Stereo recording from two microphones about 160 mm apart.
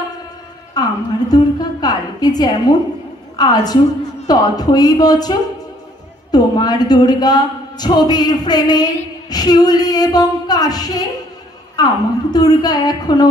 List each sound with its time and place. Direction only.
0.8 s music: 25° left (ahead or behind)
1.3 s a sound: 25° left (ahead or behind)
3.3 s a woman's voice: 25° left (ahead or behind)